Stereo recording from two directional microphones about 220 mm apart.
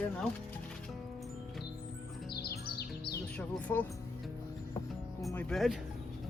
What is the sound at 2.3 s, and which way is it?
Music, 45° left (ahead or behind).